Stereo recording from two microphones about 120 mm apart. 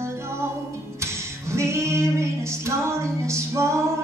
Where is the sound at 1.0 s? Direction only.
25° right (ahead or behind).